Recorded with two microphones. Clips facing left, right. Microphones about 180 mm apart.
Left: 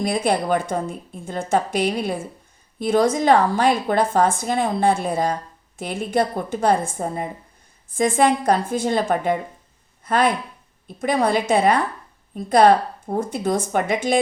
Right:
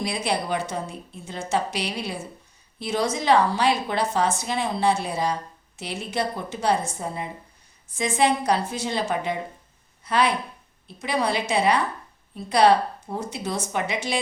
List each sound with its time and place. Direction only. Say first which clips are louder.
0.0 s a woman's voice: left 6 dB; 50° left (ahead or behind)